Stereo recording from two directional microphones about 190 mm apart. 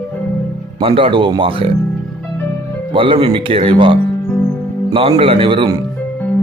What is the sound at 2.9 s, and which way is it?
Speech, 25° right (ahead or behind).